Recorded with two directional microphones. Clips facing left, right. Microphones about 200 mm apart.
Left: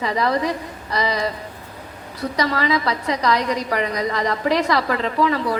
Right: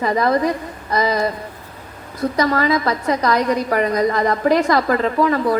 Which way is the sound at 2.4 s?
50° right (ahead or behind).